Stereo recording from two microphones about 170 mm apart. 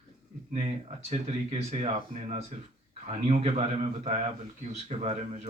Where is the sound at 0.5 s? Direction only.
40° right (ahead or behind).